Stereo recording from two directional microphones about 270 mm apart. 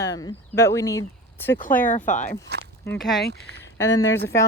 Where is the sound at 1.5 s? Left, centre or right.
Left.